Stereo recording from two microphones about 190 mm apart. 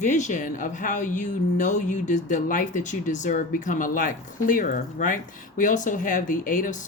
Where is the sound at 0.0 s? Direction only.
40° left (ahead or behind).